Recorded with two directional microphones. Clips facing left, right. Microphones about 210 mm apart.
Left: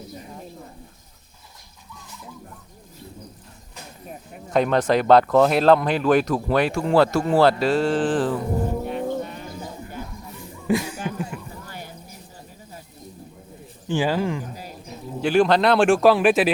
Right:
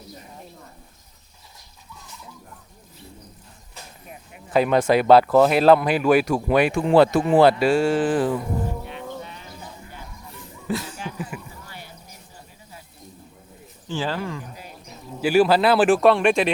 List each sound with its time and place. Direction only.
4.1 s a sound: 40° left (ahead or behind)
4.5 s speech: 5° right (ahead or behind)
8.8 s sheep: 45° left (ahead or behind)
10.7 s speech: 15° left (ahead or behind)
11.3 s a sound: 5° right (ahead or behind)
13.8 s speech: 15° left (ahead or behind)
15.2 s speech: 5° right (ahead or behind)